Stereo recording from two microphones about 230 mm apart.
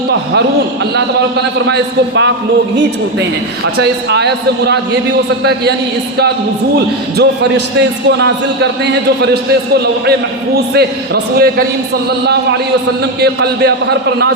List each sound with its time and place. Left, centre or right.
0.9 s a man's voice: right
3.8 s a man's voice: right
6.7 s a man's voice: right
13.2 s a man's voice: right